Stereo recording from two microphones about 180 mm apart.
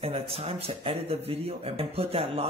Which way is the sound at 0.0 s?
30° right (ahead or behind).